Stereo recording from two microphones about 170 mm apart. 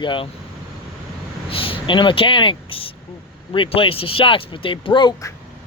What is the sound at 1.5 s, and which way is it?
Speech, 30° left (ahead or behind).